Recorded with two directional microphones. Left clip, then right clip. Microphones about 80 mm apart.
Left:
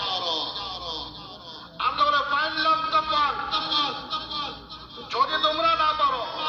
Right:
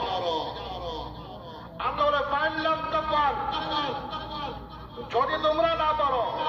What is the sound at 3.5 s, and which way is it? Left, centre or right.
A man's voice, right.